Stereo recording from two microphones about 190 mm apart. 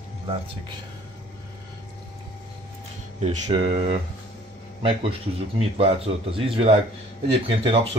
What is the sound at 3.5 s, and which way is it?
Speech, 25° right (ahead or behind).